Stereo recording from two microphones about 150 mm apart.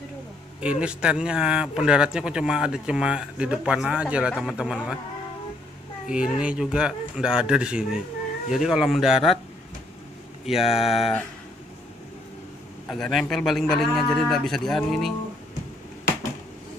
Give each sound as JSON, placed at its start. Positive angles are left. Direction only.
{"t": 0.6, "sound": "speech", "side_deg": -5}
{"t": 6.0, "sound": "speech", "side_deg": -5}
{"t": 10.6, "sound": "speech", "side_deg": 40}
{"t": 12.8, "sound": "speech", "side_deg": 0}